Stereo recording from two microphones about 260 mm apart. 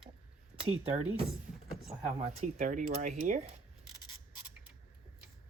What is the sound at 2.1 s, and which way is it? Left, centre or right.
Speech, right.